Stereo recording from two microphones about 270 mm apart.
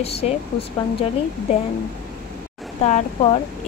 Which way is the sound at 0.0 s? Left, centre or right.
Left.